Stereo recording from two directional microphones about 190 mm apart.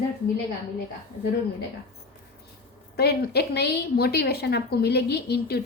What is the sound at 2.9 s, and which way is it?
A woman's voice, 60° left (ahead or behind).